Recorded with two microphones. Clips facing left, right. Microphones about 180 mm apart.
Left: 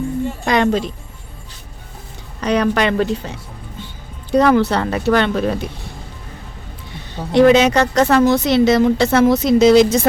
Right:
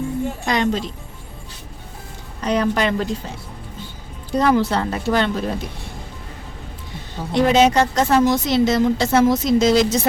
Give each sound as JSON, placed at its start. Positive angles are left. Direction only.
{"t": 0.4, "sound": "a woman's voice", "side_deg": 60}
{"t": 2.4, "sound": "speech", "side_deg": 70}
{"t": 4.3, "sound": "speech", "side_deg": 65}
{"t": 7.3, "sound": "a woman's voice", "side_deg": 70}